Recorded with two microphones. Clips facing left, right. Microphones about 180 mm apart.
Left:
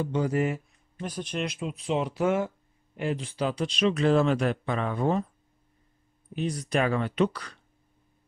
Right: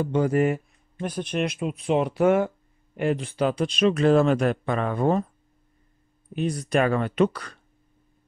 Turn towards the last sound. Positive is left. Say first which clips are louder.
# right 4 dB
turn(degrees=-50)  # may be behind; listen again after turning